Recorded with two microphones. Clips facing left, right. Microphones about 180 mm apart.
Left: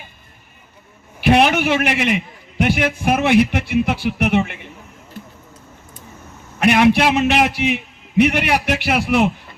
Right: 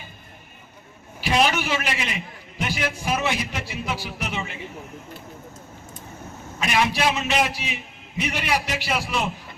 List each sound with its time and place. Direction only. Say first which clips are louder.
1.2 s a man's voice: left 7 dB; 60° left (ahead or behind)
6.6 s a man's voice: left 9 dB; 65° left (ahead or behind)